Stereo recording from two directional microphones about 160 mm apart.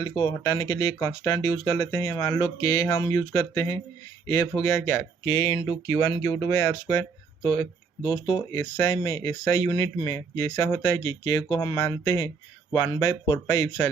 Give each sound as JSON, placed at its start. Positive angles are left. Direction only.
{"t": 0.0, "sound": "speech", "side_deg": 30}